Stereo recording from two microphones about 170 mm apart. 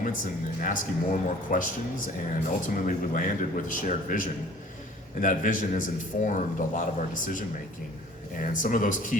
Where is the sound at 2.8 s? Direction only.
50° left (ahead or behind).